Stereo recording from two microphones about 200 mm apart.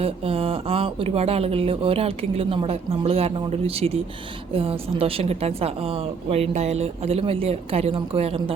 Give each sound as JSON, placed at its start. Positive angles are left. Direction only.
{"t": 0.0, "sound": "a woman's voice", "side_deg": -30}